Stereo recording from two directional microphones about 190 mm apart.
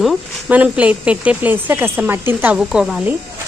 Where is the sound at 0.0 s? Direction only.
Centre (ahead or behind).